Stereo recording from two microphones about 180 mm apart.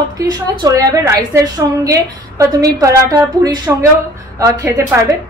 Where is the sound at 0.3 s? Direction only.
20° right (ahead or behind).